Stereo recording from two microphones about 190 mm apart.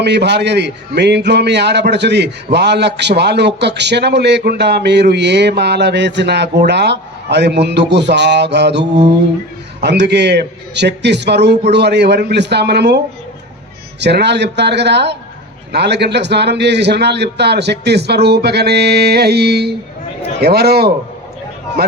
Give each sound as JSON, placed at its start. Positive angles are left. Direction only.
{"t": 0.0, "sound": "a man's voice", "side_deg": -60}
{"t": 14.0, "sound": "a man's voice", "side_deg": -65}